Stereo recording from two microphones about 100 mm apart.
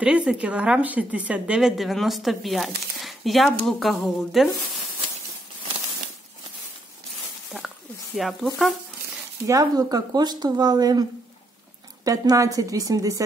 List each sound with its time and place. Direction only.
0.0 s a woman's voice: 10° right (ahead or behind)
1.8 s speech: centre (ahead or behind)
8.2 s speech: centre (ahead or behind)
9.5 s a woman's voice: 35° right (ahead or behind)